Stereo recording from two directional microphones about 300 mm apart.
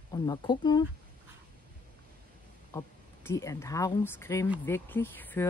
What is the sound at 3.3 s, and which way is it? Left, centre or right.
Speech, centre.